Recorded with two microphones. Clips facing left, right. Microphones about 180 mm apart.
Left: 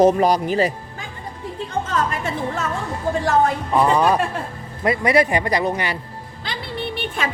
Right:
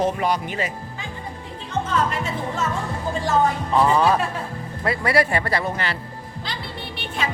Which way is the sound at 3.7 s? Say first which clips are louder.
Left 1 dB; 10° left (ahead or behind).